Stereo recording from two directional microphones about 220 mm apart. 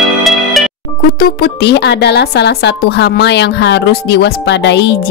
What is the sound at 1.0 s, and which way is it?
Speech, 45° left (ahead or behind).